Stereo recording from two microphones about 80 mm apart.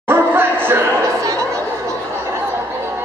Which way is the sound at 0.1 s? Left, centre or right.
Right.